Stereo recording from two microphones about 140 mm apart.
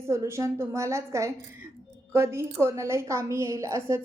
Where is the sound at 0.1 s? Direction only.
20° right (ahead or behind).